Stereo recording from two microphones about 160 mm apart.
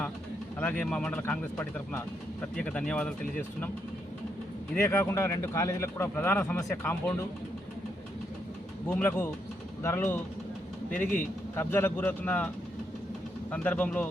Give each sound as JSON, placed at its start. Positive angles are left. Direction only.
{"t": 0.6, "sound": "speech", "side_deg": 10}
{"t": 4.7, "sound": "speech", "side_deg": 15}
{"t": 8.9, "sound": "speech", "side_deg": 10}
{"t": 11.0, "sound": "speech", "side_deg": 55}
{"t": 11.5, "sound": "speech", "side_deg": 15}
{"t": 13.5, "sound": "speech", "side_deg": 10}